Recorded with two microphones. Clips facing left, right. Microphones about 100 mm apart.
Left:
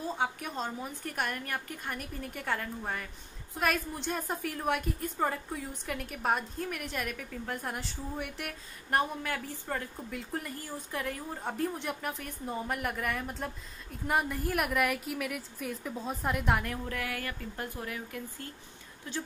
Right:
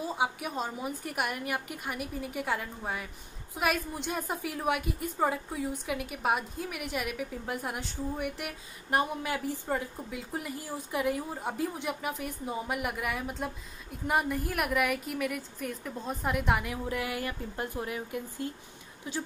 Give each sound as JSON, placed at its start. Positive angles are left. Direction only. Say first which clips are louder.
{"t": 0.0, "sound": "a woman's voice", "louder": "right 2 dB", "side_deg": -10}
{"t": 16.9, "sound": "a woman's voice", "louder": "right 3 dB", "side_deg": -20}